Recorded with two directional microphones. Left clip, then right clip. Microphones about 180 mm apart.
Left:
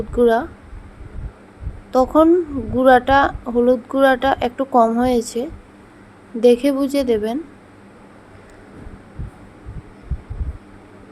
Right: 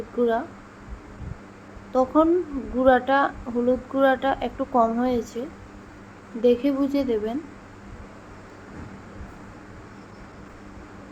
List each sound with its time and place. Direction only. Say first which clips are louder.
0.2 s speech: left 8 dB; 45° left (ahead or behind)
1.9 s speech: left 6 dB; 45° left (ahead or behind)